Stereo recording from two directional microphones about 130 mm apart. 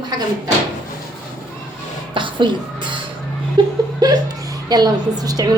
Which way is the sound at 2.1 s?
40° right (ahead or behind).